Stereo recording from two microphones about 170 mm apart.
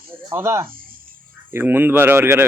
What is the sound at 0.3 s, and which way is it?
A man's voice, 15° right (ahead or behind).